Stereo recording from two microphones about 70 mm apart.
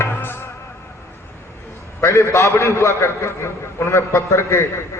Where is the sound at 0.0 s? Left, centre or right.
Left.